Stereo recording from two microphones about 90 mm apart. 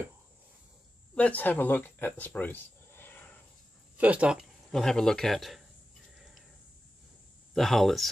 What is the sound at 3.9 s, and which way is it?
Speech, 15° right (ahead or behind).